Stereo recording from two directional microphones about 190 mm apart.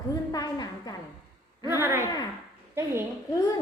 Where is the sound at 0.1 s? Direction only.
20° left (ahead or behind).